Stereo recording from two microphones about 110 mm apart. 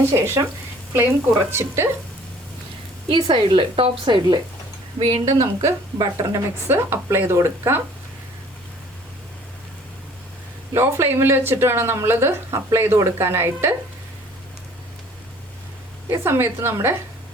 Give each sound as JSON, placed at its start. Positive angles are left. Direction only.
{"t": 0.0, "sound": "a woman's voice", "side_deg": -20}
{"t": 3.3, "sound": "speech", "side_deg": -50}
{"t": 5.0, "sound": "a woman's voice", "side_deg": -30}
{"t": 10.8, "sound": "a woman's voice", "side_deg": -20}
{"t": 16.0, "sound": "a woman's voice", "side_deg": -25}